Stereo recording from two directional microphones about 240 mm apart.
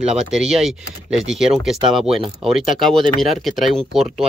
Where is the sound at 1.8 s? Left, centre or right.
Right.